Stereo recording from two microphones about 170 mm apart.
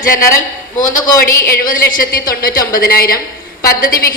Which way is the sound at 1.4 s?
55° left (ahead or behind).